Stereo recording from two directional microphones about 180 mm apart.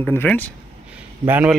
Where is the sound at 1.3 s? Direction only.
10° right (ahead or behind).